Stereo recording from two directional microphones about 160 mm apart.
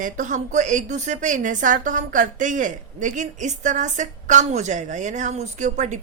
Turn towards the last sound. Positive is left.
turn(degrees=-50)  # may be behind; listen again after turning